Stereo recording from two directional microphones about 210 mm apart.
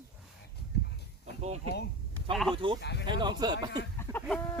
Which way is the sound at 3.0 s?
20° right (ahead or behind).